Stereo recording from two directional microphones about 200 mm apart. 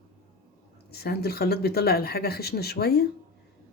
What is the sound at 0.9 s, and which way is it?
Speech, 50° left (ahead or behind).